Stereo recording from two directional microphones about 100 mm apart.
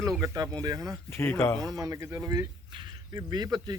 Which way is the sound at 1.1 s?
25° left (ahead or behind).